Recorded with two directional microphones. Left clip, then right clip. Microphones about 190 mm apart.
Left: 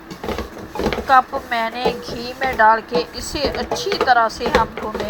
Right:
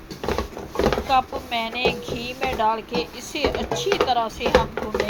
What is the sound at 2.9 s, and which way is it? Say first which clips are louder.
Speech: left 6 dB; 45° left (ahead or behind).